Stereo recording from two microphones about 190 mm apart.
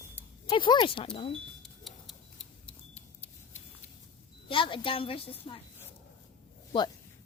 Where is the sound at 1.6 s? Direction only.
Centre (ahead or behind).